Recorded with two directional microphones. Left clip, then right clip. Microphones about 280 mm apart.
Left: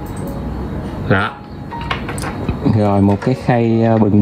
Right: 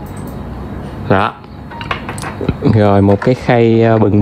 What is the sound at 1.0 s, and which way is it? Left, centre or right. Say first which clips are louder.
Speech: right 4 dB; centre.